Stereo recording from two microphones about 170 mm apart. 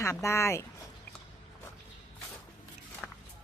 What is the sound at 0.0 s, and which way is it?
Speech, 15° left (ahead or behind).